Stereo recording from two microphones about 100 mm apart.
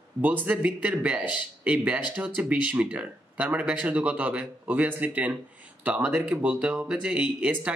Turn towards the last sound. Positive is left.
turn(degrees=-10)  # may be behind; listen again after turning